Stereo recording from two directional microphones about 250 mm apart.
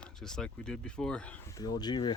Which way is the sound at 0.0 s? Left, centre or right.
Centre.